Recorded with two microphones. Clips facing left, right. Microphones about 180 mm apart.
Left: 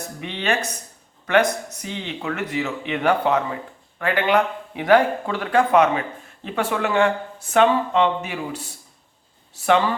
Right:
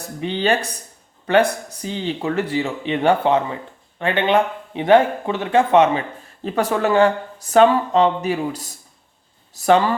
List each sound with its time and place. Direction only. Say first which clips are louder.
0.2 s speech: right 5 dB; 30° right (ahead or behind)
6.4 s speech: right 4 dB; 40° right (ahead or behind)